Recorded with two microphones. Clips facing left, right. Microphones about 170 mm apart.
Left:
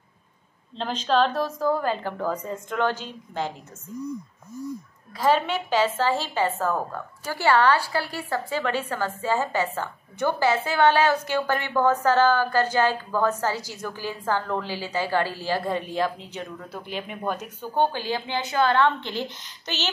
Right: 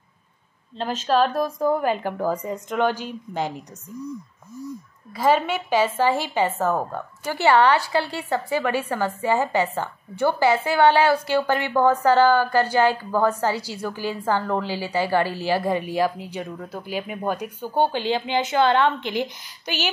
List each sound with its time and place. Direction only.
0.7 s a woman's voice: 5° right (ahead or behind)
5.1 s a woman's voice: 10° right (ahead or behind)